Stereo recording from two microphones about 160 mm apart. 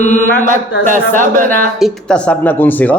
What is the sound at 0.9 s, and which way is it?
Speech, 55° right (ahead or behind).